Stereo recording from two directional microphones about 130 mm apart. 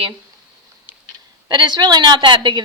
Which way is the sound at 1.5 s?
35° right (ahead or behind).